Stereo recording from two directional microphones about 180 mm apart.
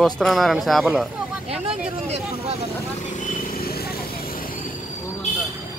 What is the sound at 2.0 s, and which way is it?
Vehicle, 35° right (ahead or behind).